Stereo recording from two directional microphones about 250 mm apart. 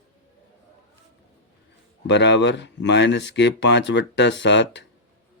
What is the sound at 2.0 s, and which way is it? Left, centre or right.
Speech, left.